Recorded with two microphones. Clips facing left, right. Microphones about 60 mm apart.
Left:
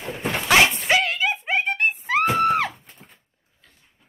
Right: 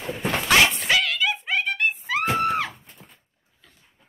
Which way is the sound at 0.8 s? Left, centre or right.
Left.